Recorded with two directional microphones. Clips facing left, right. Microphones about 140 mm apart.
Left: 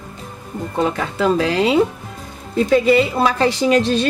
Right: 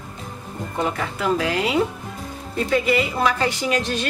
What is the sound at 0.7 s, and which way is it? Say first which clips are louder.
Speech: left 5 dB; 30° left (ahead or behind).